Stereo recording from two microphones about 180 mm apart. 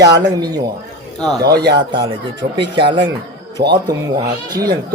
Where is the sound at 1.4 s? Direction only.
65° right (ahead or behind).